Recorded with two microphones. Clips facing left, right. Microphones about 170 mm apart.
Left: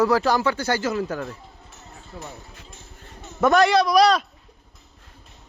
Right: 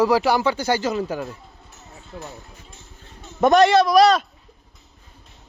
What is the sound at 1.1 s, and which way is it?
Speech, 10° right (ahead or behind).